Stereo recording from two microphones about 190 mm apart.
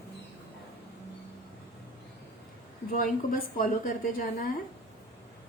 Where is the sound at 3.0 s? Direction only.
50° left (ahead or behind).